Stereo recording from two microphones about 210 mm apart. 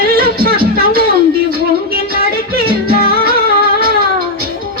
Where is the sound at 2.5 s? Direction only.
45° right (ahead or behind).